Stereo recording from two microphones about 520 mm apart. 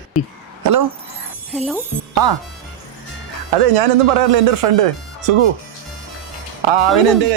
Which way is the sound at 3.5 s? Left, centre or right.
Right.